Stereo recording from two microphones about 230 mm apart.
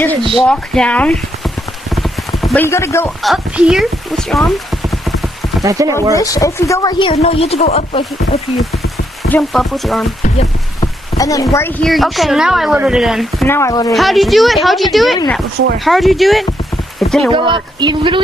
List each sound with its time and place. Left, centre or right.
0.3 s a woman's voice: centre
1.9 s clip-clop: centre
3.2 s speech: centre
5.6 s speech: centre
6.1 s speech: centre
9.2 s a woman's voice: centre
10.8 s rain on surface: centre
11.5 s a woman's voice: centre
13.5 s speech: centre
13.9 s a woman's voice: centre
17.3 s speech: right